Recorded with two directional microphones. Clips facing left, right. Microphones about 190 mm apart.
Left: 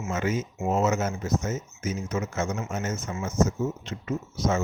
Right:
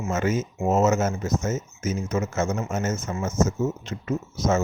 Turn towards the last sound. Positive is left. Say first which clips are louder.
# right 3 dB
turn(degrees=-45)  # may be behind; listen again after turning